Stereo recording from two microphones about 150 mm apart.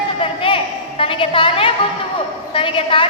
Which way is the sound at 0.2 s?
35° left (ahead or behind).